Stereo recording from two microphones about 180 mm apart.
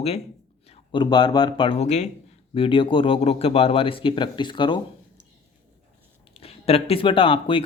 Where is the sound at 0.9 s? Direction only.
25° left (ahead or behind).